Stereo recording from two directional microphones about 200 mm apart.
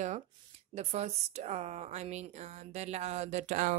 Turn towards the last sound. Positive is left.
turn(degrees=-35)  # may be behind; listen again after turning